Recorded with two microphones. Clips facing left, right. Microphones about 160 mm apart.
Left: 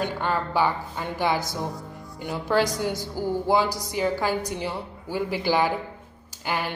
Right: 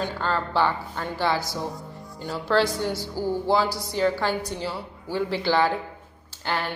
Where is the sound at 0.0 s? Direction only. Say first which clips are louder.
Left 1 dB; 15° left (ahead or behind).